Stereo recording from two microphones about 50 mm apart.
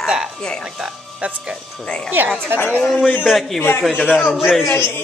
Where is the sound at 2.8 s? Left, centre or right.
Centre.